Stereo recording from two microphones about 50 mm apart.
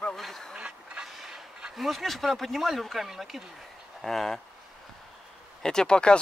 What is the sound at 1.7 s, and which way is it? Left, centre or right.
Speech, centre.